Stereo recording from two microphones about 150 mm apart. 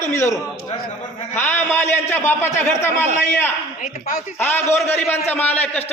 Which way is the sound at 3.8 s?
70° left (ahead or behind).